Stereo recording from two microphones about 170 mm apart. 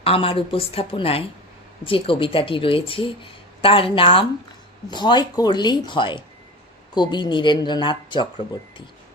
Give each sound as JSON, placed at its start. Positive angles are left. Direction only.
{"t": 0.0, "sound": "speech", "side_deg": 35}